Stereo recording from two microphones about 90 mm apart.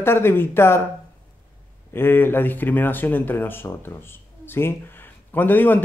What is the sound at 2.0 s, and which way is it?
Speech, 25° left (ahead or behind).